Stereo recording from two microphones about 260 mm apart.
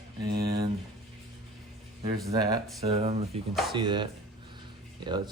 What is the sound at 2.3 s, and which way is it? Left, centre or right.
Speech, centre.